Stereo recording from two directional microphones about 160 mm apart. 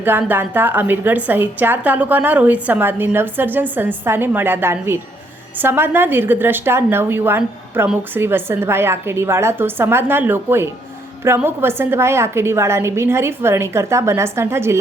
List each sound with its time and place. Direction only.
0.0 s speech: 10° right (ahead or behind)